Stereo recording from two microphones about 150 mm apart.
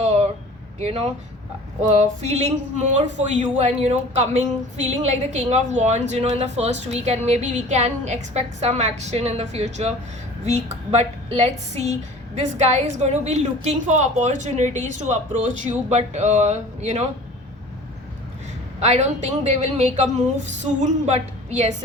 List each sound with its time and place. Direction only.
0.8 s a woman's voice: 45° right (ahead or behind)
18.8 s a woman's voice: 45° right (ahead or behind)